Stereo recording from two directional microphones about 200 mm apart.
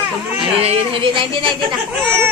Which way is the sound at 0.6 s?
30° right (ahead or behind).